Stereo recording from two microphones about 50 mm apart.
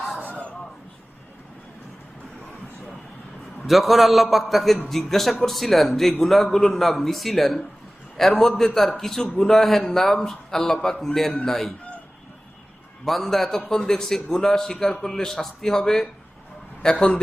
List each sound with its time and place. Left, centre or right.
0.3 s a sound: left
3.7 s a man's voice: centre
13.1 s a man's voice: centre